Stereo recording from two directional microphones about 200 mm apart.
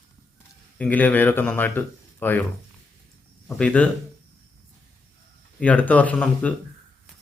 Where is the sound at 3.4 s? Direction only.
5° left (ahead or behind).